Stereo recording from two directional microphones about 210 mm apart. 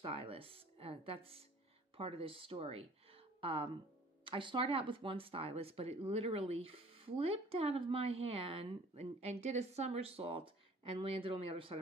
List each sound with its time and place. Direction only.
0.0 s speech: 25° right (ahead or behind)